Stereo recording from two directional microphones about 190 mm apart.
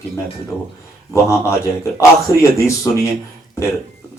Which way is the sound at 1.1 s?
15° left (ahead or behind).